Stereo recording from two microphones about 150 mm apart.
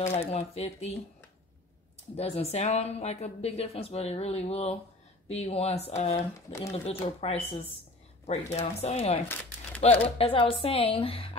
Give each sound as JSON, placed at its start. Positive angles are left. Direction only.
{"t": 0.0, "sound": "speech", "side_deg": 45}
{"t": 2.1, "sound": "speech", "side_deg": 45}
{"t": 9.3, "sound": "crumpling", "side_deg": 15}
{"t": 10.1, "sound": "a woman's voice", "side_deg": 40}